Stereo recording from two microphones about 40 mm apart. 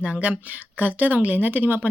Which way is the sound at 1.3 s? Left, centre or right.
Right.